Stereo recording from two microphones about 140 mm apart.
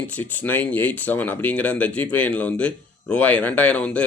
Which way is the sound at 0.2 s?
10° left (ahead or behind).